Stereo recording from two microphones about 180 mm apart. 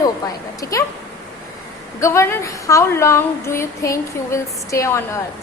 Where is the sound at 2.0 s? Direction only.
15° left (ahead or behind).